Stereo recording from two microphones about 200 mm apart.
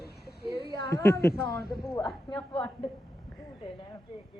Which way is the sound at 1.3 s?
50° left (ahead or behind).